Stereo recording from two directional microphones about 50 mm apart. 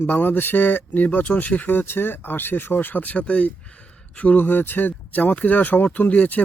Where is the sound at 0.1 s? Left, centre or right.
Left.